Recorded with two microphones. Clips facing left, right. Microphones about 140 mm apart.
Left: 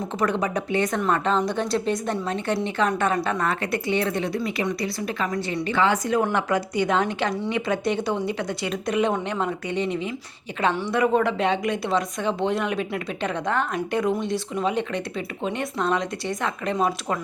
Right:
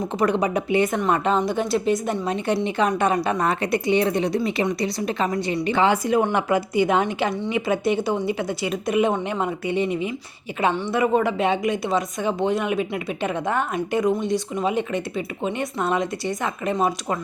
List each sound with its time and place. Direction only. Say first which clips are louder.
0.2 s a woman's voice: right 3 dB; 15° right (ahead or behind)
2.2 s a woman's voice: right 3 dB; 15° right (ahead or behind)